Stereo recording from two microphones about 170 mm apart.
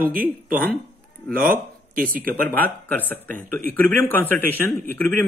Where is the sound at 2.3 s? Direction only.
10° left (ahead or behind).